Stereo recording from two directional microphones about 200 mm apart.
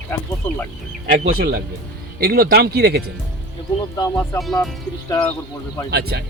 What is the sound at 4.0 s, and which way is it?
Speech, 15° left (ahead or behind).